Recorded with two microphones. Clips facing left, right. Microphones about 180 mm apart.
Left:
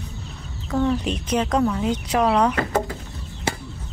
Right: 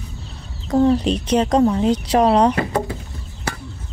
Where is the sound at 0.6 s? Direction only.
35° right (ahead or behind).